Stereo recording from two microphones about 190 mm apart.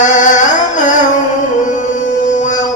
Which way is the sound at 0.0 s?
40° left (ahead or behind).